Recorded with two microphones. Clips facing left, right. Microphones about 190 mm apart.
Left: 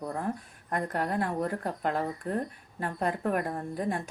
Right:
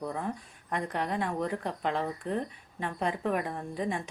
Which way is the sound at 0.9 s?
Centre (ahead or behind).